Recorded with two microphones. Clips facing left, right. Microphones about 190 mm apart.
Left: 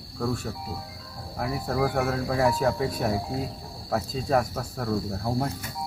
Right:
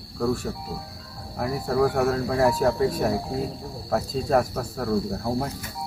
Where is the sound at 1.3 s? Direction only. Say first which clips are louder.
Right 4 dB; centre (ahead or behind).